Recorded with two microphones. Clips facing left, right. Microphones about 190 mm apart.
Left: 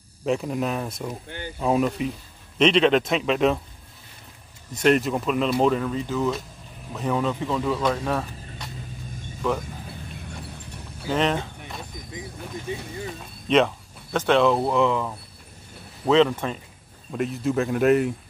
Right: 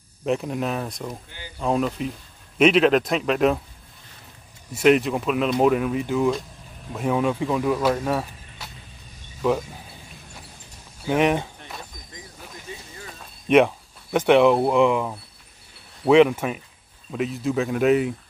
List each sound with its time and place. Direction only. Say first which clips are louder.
0.2 s speech: even; centre (ahead or behind)
4.7 s speech: right 2 dB; 5° right (ahead or behind)
11.1 s speech: right 3 dB; 15° right (ahead or behind)
12.7 s speech: left 8 dB; 20° left (ahead or behind)
13.5 s speech: right 3 dB; 10° right (ahead or behind)
17.1 s speech: even; centre (ahead or behind)